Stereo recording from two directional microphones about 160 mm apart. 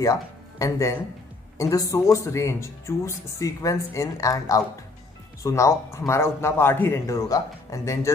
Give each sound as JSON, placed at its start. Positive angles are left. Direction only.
{"t": 0.0, "sound": "a man's voice", "side_deg": 20}